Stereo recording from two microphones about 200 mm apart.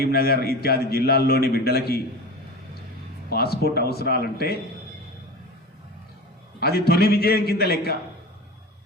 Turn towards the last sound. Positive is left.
turn(degrees=50)  # may be behind; listen again after turning